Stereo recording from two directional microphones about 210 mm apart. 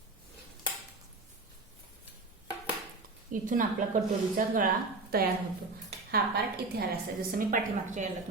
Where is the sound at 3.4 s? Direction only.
40° right (ahead or behind).